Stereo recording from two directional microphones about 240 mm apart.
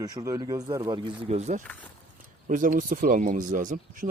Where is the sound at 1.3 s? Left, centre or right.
Right.